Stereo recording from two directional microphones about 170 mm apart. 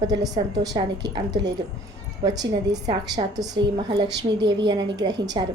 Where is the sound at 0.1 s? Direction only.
20° right (ahead or behind).